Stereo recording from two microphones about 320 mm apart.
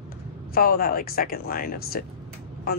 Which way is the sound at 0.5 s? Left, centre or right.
Left.